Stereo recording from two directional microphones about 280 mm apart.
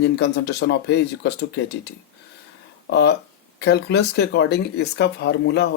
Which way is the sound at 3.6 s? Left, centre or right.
Left.